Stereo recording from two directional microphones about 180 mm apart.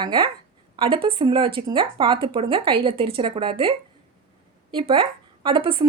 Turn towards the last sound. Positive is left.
turn(degrees=-30)  # may be behind; listen again after turning